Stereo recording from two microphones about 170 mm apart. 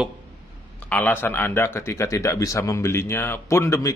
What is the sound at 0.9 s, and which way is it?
Speech, 10° left (ahead or behind).